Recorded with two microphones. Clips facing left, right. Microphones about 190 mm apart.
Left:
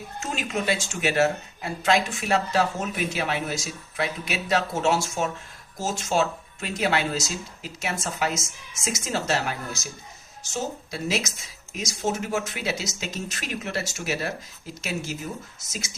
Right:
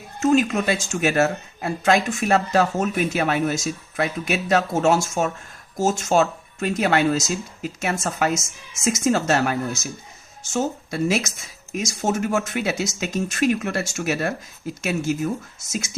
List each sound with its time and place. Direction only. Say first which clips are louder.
0.2 s speech: right 11 dB; 45° right (ahead or behind)